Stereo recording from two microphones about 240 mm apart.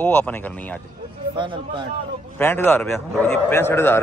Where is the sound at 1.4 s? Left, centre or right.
Right.